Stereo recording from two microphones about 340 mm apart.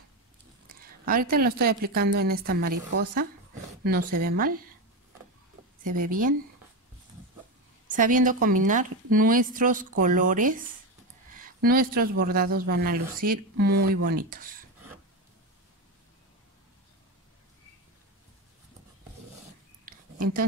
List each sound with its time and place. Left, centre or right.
0.7 s a woman's voice: right
3.8 s speech: right
5.9 s speech: right
7.9 s speech: right